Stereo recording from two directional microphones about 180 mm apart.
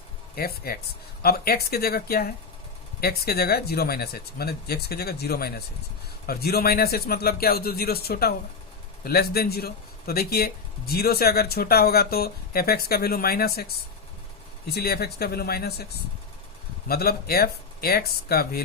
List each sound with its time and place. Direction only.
0.3 s speech: 55° left (ahead or behind)
14.7 s speech: 60° left (ahead or behind)
16.9 s speech: 60° left (ahead or behind)